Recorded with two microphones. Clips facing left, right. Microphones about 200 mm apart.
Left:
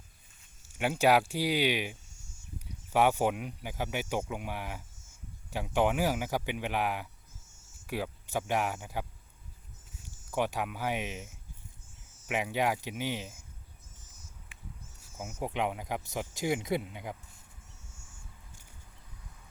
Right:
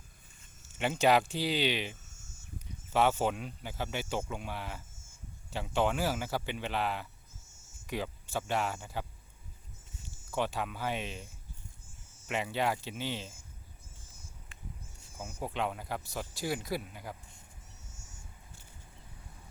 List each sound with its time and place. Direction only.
0.7 s speech: 10° left (ahead or behind)
10.3 s speech: 10° left (ahead or behind)
12.3 s speech: 15° left (ahead or behind)
15.4 s speech: 15° left (ahead or behind)
17.9 s a sound: 40° right (ahead or behind)